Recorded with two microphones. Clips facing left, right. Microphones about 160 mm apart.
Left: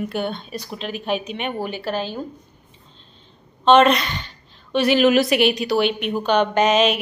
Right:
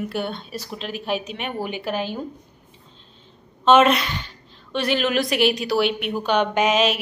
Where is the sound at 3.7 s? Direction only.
5° right (ahead or behind).